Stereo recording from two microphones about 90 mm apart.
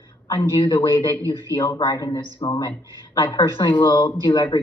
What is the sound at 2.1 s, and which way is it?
Speech, 70° left (ahead or behind).